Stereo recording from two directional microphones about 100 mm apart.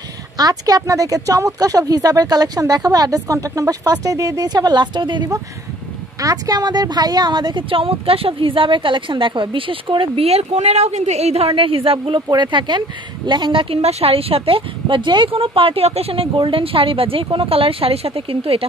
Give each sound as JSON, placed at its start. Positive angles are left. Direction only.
{"t": 0.4, "sound": "speech", "side_deg": -40}
{"t": 6.2, "sound": "speech", "side_deg": -40}
{"t": 12.3, "sound": "speech", "side_deg": -50}
{"t": 15.3, "sound": "speech", "side_deg": -65}